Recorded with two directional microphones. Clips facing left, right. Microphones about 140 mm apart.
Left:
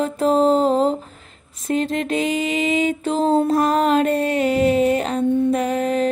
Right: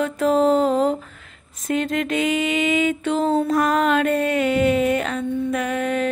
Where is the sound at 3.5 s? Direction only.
30° left (ahead or behind).